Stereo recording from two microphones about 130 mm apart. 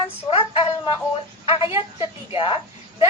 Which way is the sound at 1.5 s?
40° left (ahead or behind).